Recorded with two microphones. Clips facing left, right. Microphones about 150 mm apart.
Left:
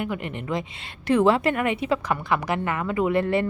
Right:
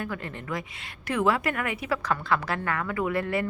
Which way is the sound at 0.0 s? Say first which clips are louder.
Left 5 dB; 20° left (ahead or behind).